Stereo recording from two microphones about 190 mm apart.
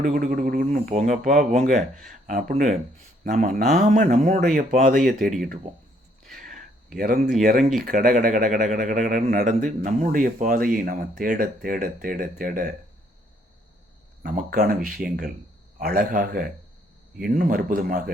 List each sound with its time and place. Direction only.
0.3 s speech: 45° right (ahead or behind)
6.3 s a sound: 45° right (ahead or behind)
7.8 s speech: 50° right (ahead or behind)
14.2 s a man's voice: 50° right (ahead or behind)